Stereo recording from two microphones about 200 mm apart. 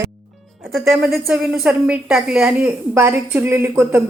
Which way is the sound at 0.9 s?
Centre (ahead or behind).